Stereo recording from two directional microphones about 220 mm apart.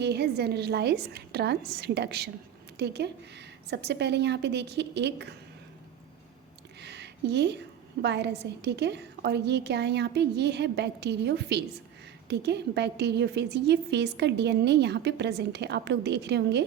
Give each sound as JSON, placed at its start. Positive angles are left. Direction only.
{"t": 0.0, "sound": "a woman's voice", "side_deg": -50}
{"t": 6.8, "sound": "a sound", "side_deg": -50}
{"t": 8.0, "sound": "a woman's voice", "side_deg": -50}